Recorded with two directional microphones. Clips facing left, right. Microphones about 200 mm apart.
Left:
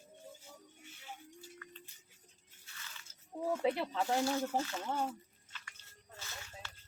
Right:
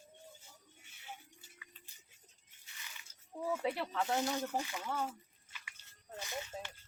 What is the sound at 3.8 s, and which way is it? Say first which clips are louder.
Speech: left 1 dB; 20° left (ahead or behind).